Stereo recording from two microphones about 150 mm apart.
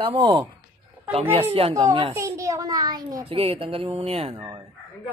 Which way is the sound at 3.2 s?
40° right (ahead or behind).